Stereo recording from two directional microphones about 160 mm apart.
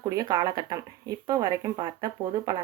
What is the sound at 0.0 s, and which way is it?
Speech, 20° right (ahead or behind).